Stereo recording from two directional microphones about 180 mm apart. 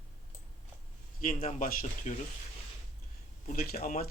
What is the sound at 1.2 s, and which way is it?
Speech, 50° left (ahead or behind).